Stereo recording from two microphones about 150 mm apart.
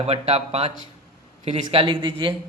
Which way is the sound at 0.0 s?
45° right (ahead or behind).